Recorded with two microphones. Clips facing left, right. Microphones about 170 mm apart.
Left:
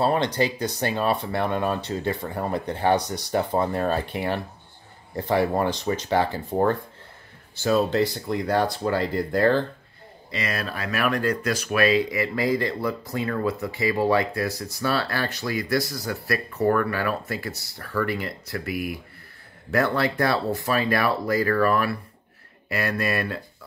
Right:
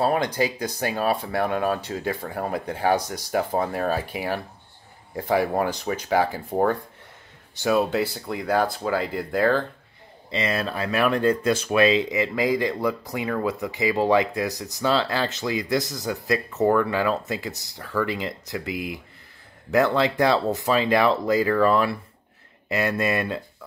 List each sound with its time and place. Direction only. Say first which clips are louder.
0.0 s speech: even; 10° right (ahead or behind)
10.3 s speech: right 4 dB; 25° right (ahead or behind)